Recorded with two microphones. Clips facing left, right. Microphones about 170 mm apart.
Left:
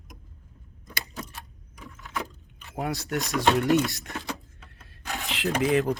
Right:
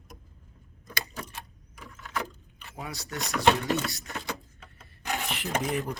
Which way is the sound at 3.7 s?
Centre (ahead or behind).